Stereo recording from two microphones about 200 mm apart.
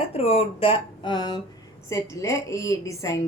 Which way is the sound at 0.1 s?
30° left (ahead or behind).